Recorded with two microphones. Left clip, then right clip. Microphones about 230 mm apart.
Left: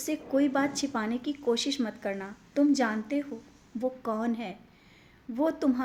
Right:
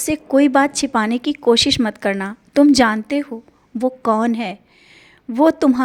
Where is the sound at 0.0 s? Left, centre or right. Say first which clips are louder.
Right 12 dB; right.